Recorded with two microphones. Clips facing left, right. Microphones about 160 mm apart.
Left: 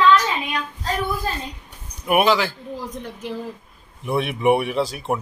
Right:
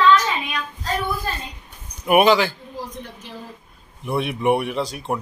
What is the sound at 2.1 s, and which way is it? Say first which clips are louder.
Speech: right 3 dB; centre (ahead or behind).